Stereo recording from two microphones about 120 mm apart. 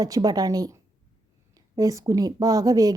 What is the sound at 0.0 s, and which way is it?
A woman's voice, 30° right (ahead or behind).